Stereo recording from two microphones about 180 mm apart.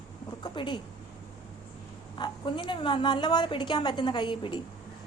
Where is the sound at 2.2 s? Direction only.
25° left (ahead or behind).